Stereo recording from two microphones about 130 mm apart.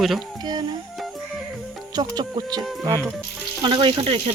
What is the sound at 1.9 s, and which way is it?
Speech, 30° right (ahead or behind).